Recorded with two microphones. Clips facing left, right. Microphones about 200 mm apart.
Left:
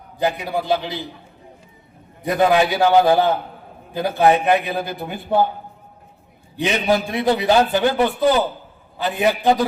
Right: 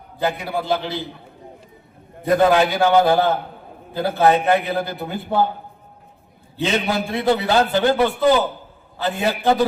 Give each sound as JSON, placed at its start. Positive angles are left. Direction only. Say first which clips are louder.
{"t": 0.2, "sound": "a man's voice", "louder": "left 1 dB", "side_deg": 15}
{"t": 2.2, "sound": "a man's voice", "louder": "right 1 dB", "side_deg": 15}
{"t": 6.6, "sound": "a man's voice", "louder": "left 2 dB", "side_deg": 15}